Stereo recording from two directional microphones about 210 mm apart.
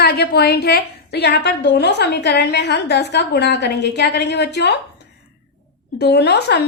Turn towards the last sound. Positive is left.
turn(degrees=50)  # may be behind; listen again after turning